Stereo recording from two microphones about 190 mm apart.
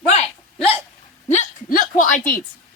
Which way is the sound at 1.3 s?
45° left (ahead or behind).